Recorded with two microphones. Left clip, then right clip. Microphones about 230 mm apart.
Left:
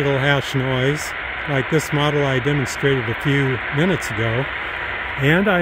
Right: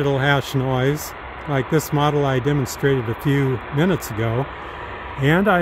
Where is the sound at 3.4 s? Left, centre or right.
Centre.